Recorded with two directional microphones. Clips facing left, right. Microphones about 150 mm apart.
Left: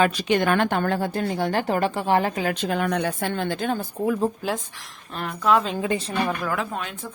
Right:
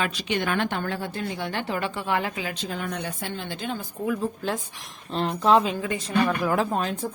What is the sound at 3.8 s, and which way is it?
Speech, 35° left (ahead or behind).